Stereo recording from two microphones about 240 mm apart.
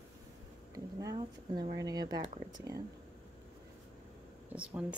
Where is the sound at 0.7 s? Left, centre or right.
Centre.